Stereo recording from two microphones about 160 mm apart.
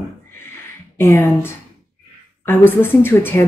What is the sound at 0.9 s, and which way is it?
Speech, 15° left (ahead or behind).